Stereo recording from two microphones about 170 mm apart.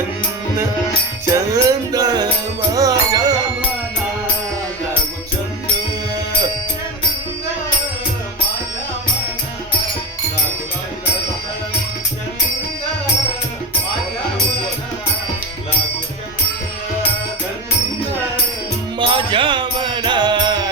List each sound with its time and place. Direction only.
1.5 s music: 20° right (ahead or behind)
18.9 s music: 30° right (ahead or behind)